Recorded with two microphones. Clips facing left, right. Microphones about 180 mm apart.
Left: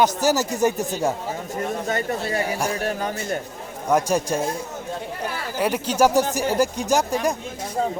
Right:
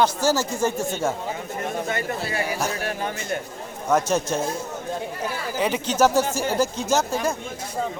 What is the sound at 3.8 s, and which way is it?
Speech, 10° left (ahead or behind).